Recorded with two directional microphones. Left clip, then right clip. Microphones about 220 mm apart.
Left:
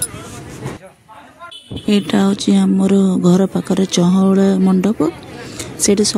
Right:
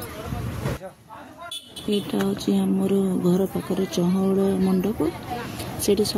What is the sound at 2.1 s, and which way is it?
Speech, 60° right (ahead or behind).